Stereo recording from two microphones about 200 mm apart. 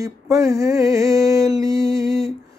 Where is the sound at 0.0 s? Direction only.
15° right (ahead or behind).